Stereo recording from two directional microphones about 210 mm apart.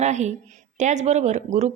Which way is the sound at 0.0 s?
35° right (ahead or behind).